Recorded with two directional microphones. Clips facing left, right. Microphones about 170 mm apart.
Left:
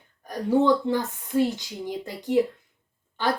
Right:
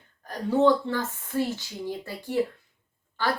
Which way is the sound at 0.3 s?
15° left (ahead or behind).